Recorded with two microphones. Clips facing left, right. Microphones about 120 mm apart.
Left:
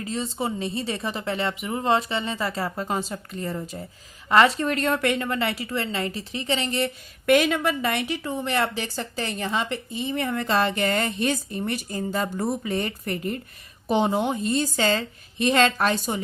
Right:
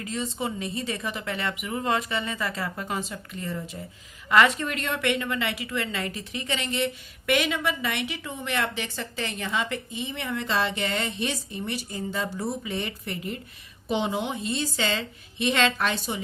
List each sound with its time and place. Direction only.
0.0 s a woman's voice: 30° left (ahead or behind)